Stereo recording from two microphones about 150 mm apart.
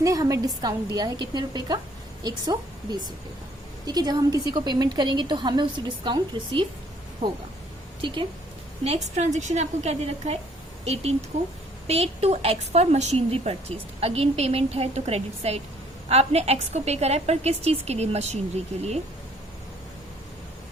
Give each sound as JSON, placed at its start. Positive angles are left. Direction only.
{"t": 0.0, "sound": "a woman's voice", "side_deg": -25}
{"t": 3.8, "sound": "a woman's voice", "side_deg": -25}
{"t": 9.1, "sound": "a woman's voice", "side_deg": -50}